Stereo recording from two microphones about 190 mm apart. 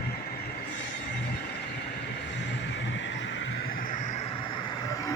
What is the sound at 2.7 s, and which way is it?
Vehicle, 75° left (ahead or behind).